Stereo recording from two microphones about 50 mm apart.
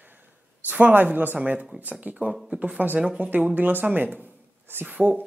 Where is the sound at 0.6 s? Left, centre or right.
Right.